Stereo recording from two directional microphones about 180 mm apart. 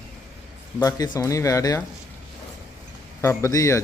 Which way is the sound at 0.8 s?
20° left (ahead or behind).